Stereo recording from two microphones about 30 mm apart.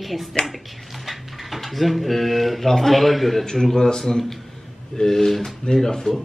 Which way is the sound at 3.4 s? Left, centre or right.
Centre.